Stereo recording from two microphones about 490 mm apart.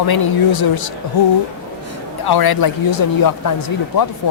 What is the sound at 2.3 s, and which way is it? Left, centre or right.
Speech, left.